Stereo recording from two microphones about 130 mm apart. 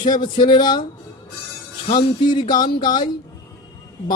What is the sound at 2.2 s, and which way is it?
Speech, 35° left (ahead or behind).